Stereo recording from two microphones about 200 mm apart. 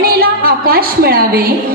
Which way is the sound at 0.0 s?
50° right (ahead or behind).